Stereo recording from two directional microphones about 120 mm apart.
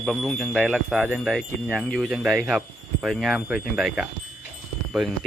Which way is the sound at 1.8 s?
5° left (ahead or behind).